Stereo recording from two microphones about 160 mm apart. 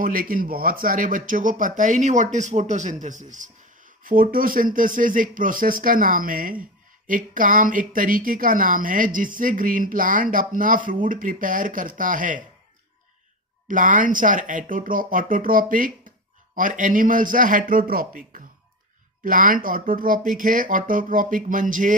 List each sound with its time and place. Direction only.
0.0 s speech: 60° right (ahead or behind)
13.7 s speech: 55° right (ahead or behind)